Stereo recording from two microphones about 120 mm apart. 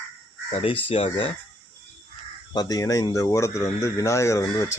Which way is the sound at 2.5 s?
30° left (ahead or behind).